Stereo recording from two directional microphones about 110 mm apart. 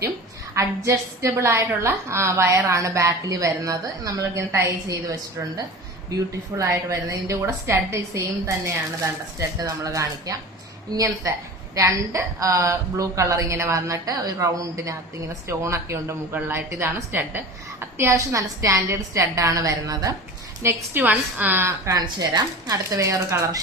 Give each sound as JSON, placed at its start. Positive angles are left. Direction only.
{"t": 0.5, "sound": "speech", "side_deg": -30}
{"t": 6.6, "sound": "speech", "side_deg": -30}
{"t": 20.6, "sound": "speech", "side_deg": -20}
{"t": 22.0, "sound": "speech", "side_deg": -40}